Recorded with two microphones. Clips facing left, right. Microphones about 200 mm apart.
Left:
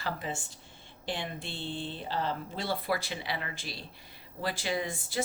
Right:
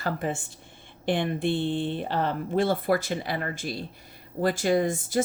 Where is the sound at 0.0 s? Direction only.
55° right (ahead or behind).